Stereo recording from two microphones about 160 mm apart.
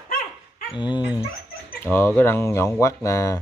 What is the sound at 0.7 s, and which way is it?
Speech, 30° left (ahead or behind).